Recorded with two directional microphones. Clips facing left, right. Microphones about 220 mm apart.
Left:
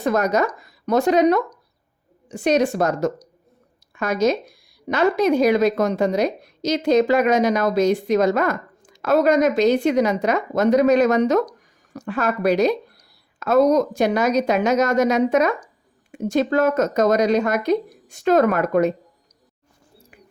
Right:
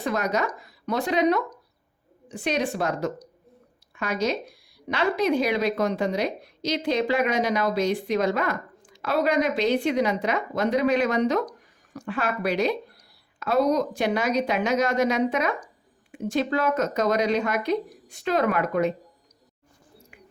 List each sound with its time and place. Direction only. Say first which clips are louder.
0.0 s speech: left 6 dB; 45° left (ahead or behind)